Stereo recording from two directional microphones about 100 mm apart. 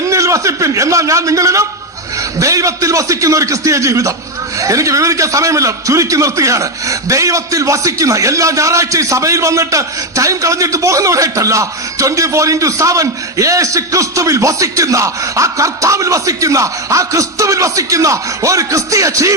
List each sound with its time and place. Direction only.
0.0 s a man's voice: 30° right (ahead or behind)